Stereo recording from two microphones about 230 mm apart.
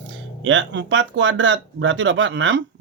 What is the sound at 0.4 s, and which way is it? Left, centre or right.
Speech, right.